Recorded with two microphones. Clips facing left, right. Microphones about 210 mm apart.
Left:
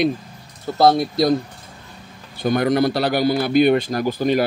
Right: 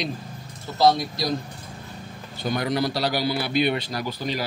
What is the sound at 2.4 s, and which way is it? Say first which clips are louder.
A man's voice: left 7 dB; 50° left (ahead or behind).